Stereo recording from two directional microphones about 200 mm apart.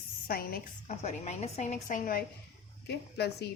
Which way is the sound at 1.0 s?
35° left (ahead or behind).